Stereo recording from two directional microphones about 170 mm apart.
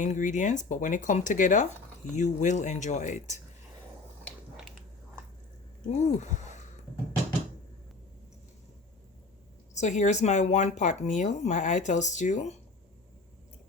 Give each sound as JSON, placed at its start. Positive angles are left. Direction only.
{"t": 0.0, "sound": "speech", "side_deg": 45}
{"t": 5.9, "sound": "speech", "side_deg": 45}
{"t": 9.7, "sound": "speech", "side_deg": 45}